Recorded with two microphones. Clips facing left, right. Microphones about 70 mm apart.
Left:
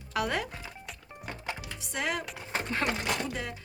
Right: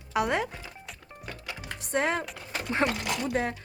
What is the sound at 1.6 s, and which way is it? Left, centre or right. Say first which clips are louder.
Music: right 9 dB; right.